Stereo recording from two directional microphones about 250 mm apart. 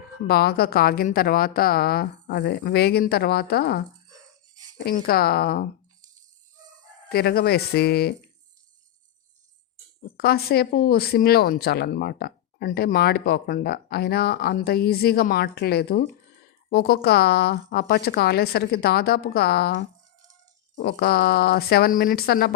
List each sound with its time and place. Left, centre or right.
0.3 s speech: left
4.9 s speech: left
7.1 s speech: left
10.2 s speech: left